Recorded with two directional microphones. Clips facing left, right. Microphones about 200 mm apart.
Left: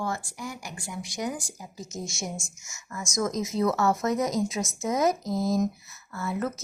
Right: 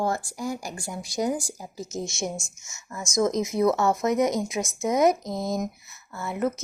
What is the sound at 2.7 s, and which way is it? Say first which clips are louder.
Speech: even; 25° right (ahead or behind).